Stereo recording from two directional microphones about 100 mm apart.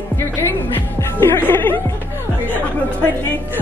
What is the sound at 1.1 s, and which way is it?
Speech, 20° left (ahead or behind).